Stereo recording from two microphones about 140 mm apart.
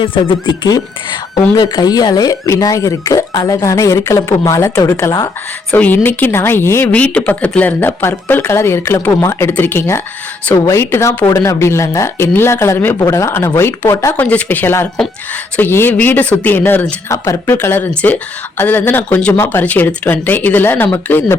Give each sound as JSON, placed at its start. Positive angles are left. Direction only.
{"t": 0.0, "sound": "speech", "side_deg": 35}
{"t": 5.7, "sound": "a woman's voice", "side_deg": 15}